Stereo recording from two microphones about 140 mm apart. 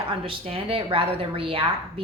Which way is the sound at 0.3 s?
40° right (ahead or behind).